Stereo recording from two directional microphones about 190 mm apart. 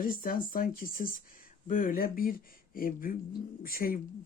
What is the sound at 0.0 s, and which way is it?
Speech, 45° left (ahead or behind).